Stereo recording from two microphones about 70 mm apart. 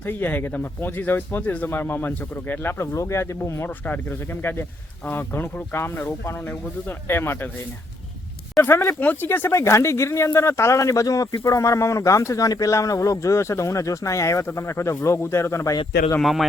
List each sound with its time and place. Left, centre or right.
0.0 s speech: left
3.8 s speech: left
8.6 s speech: left
9.0 s speech: left
16.2 s a man's voice: centre